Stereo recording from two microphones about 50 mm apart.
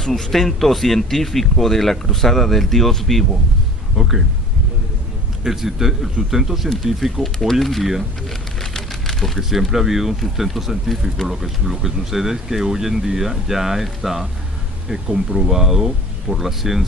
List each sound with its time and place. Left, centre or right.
0.0 s speech: centre
3.9 s speech: centre
5.4 s speech: centre